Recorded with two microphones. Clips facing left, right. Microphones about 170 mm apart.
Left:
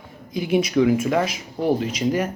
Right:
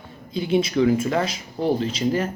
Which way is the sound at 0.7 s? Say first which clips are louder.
Left 1 dB; 10° left (ahead or behind).